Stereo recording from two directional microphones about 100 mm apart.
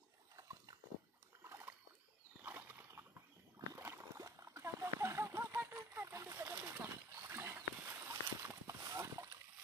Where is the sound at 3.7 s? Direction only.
30° right (ahead or behind).